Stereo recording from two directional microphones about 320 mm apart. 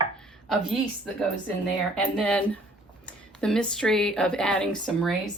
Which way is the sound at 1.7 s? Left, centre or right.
Centre.